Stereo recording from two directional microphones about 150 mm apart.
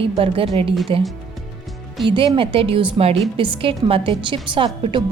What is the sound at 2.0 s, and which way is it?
A woman's voice, 35° right (ahead or behind).